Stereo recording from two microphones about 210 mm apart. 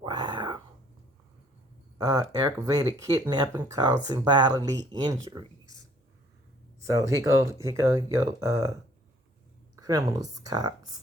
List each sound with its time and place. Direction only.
0.0 s a sound: 20° right (ahead or behind)
2.0 s speech: 15° right (ahead or behind)
6.7 s speech: 15° right (ahead or behind)